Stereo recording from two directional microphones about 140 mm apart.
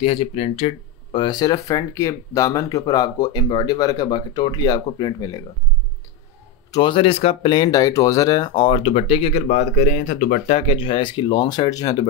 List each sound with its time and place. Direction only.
0.0 s speech: 45° left (ahead or behind)
1.2 s speech: 30° left (ahead or behind)
6.7 s speech: 35° left (ahead or behind)
9.5 s speech: 65° left (ahead or behind)
10.5 s speech: 40° left (ahead or behind)